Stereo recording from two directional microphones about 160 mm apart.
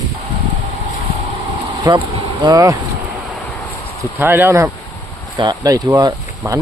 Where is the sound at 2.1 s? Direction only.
25° right (ahead or behind).